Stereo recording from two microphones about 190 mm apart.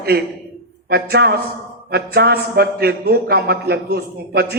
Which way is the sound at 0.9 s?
60° right (ahead or behind).